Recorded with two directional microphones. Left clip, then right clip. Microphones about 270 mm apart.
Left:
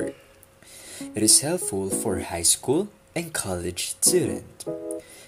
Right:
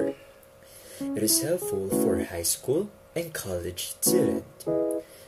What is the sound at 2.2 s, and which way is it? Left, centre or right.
Speech, left.